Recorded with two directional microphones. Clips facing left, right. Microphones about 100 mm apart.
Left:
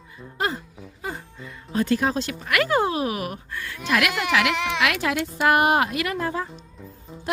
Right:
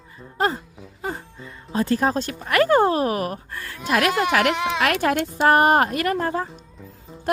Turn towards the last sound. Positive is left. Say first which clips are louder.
# right 3 dB
turn(degrees=-40)  # may be behind; listen again after turning